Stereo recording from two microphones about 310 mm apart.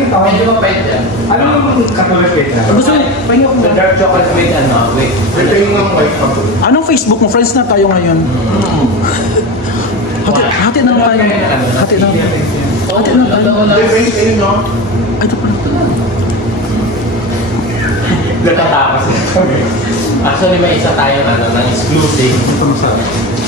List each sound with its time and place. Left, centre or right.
6.6 s speech: left